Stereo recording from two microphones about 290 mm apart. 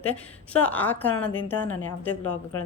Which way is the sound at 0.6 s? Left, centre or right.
Centre.